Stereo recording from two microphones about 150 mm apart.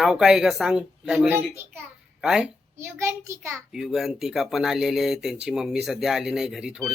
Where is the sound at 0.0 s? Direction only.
5° right (ahead or behind).